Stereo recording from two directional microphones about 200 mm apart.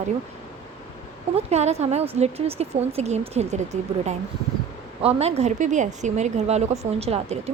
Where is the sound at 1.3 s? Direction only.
35° right (ahead or behind).